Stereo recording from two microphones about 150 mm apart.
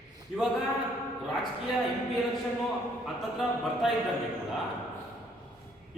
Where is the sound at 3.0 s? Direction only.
Centre (ahead or behind).